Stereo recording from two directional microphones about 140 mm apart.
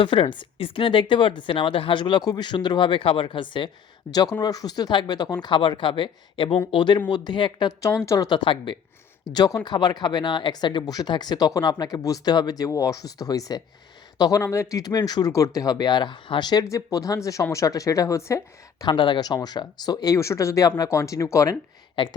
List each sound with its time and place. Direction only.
0.0 s speech: 40° left (ahead or behind)
8.4 s speech: 35° left (ahead or behind)
22.0 s speech: 35° left (ahead or behind)